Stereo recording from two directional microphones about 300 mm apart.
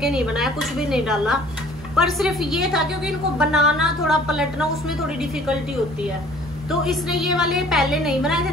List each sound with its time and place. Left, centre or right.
0.0 s a woman's voice: centre
6.8 s a woman's voice: centre